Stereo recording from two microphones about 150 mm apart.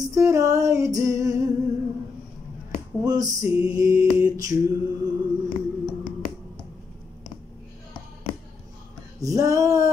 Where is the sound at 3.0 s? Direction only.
20° right (ahead or behind).